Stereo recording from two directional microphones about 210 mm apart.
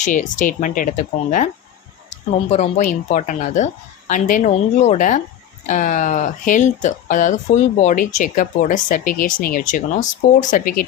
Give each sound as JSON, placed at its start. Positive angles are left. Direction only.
{"t": 0.0, "sound": "speech", "side_deg": 35}
{"t": 2.0, "sound": "speech", "side_deg": 30}